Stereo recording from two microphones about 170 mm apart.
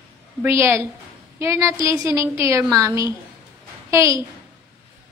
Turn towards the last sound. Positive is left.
turn(degrees=-15)  # may be behind; listen again after turning